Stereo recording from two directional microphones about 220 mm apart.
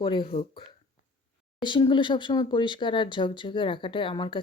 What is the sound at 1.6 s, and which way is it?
Speech, 20° left (ahead or behind).